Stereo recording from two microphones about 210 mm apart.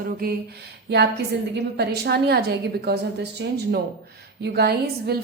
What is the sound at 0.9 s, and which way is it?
A woman's voice, 55° right (ahead or behind).